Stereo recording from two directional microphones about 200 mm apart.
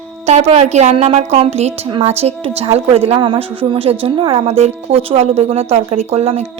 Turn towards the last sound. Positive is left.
turn(degrees=-30)  # may be behind; listen again after turning